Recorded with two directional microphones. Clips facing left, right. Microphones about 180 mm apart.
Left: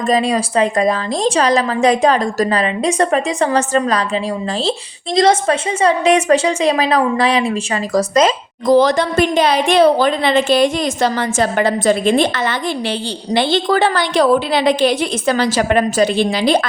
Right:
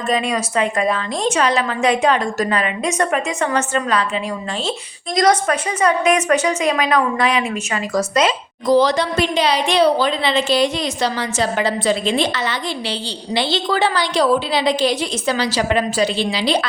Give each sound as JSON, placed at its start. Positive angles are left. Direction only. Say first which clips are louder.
{"t": 0.1, "sound": "a woman's voice", "louder": "left 4 dB", "side_deg": 35}